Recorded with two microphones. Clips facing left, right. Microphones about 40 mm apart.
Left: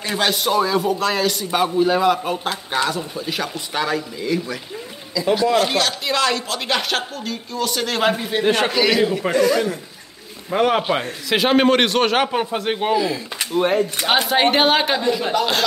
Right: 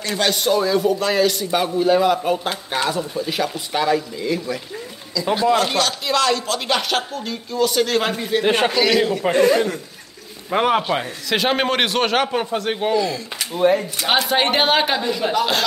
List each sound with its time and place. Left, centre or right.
0.0 s speech: centre
5.2 s speech: centre
5.5 s a man's voice: centre
9.3 s speech: right
10.8 s speech: centre
13.4 s speech: left
14.2 s speech: centre